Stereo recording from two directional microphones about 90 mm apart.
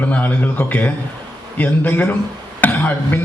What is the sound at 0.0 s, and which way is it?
A man's voice, 20° left (ahead or behind).